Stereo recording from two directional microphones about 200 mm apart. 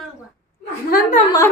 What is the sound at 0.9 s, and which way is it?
Speech, 45° left (ahead or behind).